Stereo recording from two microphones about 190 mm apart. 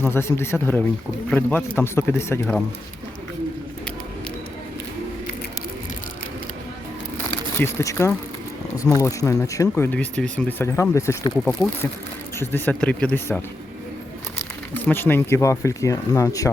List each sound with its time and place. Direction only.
0.0 s speech: 10° left (ahead or behind)
7.6 s speech: 15° left (ahead or behind)
14.8 s speech: 10° left (ahead or behind)